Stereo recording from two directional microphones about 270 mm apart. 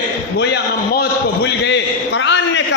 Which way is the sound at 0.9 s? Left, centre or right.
Left.